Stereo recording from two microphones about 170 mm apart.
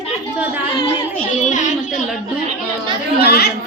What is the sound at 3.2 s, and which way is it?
Speech, 70° left (ahead or behind).